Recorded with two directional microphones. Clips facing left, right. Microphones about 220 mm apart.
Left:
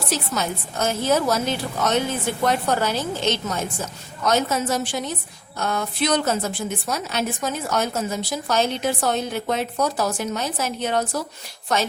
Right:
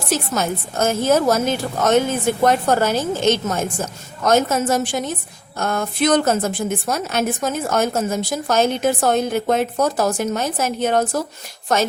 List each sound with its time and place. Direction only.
0.1 s a woman's voice: 50° right (ahead or behind)